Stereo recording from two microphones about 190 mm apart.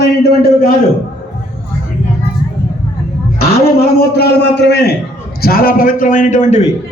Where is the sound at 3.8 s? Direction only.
60° left (ahead or behind); by 6.7 s 40° left (ahead or behind).